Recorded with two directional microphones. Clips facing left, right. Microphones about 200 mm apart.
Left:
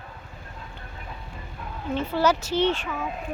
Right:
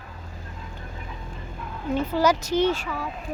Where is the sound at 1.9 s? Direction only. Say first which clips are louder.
Right 1 dB; 10° right (ahead or behind).